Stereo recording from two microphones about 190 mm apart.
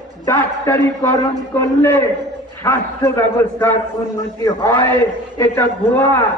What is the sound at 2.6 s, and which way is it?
A man's voice, 15° left (ahead or behind).